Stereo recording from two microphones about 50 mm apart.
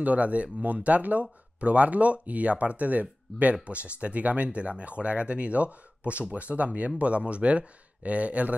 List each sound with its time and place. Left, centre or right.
0.0 s speech: right